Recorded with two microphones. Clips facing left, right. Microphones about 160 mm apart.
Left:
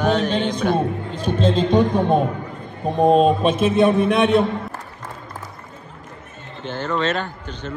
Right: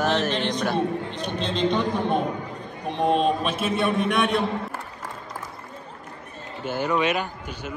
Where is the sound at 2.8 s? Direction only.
40° left (ahead or behind).